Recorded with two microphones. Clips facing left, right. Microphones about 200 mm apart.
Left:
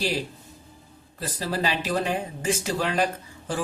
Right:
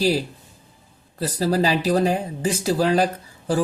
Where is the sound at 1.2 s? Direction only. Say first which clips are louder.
Right 7 dB; 40° right (ahead or behind).